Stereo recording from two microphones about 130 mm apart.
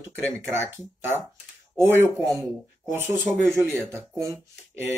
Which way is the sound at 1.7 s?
15° right (ahead or behind).